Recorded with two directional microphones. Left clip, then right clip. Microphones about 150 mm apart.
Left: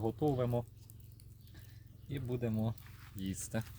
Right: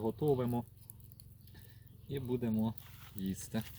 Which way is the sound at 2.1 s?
20° left (ahead or behind).